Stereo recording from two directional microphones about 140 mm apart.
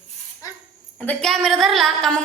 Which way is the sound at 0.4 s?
25° left (ahead or behind).